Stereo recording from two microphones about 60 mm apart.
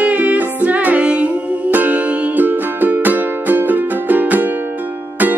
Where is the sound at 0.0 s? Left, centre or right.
Right.